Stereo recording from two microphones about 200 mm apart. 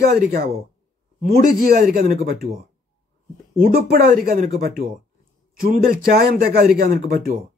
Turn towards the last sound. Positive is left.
turn(degrees=-45)  # may be behind; listen again after turning